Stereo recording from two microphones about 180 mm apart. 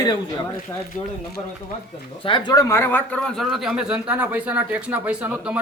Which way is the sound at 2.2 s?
25° left (ahead or behind).